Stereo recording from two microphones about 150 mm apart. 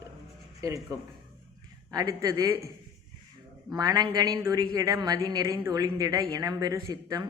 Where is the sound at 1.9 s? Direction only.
25° right (ahead or behind).